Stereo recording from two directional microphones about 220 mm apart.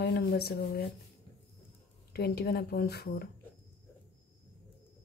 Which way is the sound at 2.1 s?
45° left (ahead or behind).